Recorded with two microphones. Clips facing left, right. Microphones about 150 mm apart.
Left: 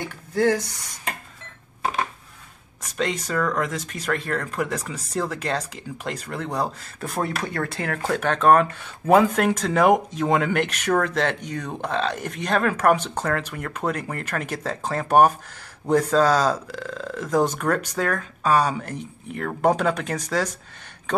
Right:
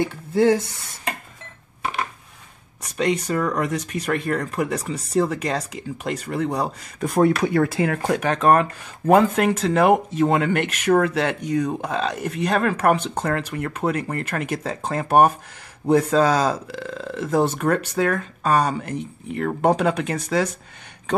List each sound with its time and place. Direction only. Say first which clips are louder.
0.3 s speech: right 3 dB; 25° right (ahead or behind)
3.3 s speech: right 2 dB; 10° right (ahead or behind)
7.2 s speech: right 9 dB; centre (ahead or behind)
7.4 s speech: right 8 dB; 20° right (ahead or behind)
8.2 s speech: left 1 dB; 5° right (ahead or behind)